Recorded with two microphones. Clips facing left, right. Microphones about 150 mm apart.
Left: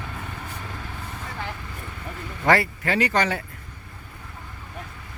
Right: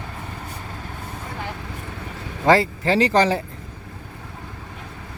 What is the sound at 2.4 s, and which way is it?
Speech, 25° right (ahead or behind).